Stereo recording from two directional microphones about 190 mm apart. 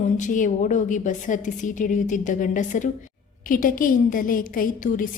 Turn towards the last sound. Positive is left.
turn(degrees=45)  # may be behind; listen again after turning